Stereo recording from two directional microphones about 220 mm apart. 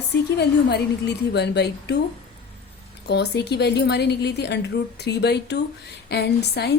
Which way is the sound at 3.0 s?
50° left (ahead or behind).